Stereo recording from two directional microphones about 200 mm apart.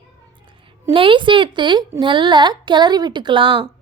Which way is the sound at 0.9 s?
25° right (ahead or behind).